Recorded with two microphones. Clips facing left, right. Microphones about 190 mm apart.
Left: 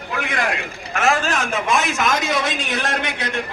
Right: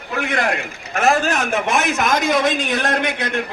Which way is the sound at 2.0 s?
50° right (ahead or behind).